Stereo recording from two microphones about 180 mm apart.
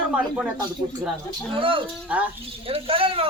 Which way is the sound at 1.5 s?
30° right (ahead or behind).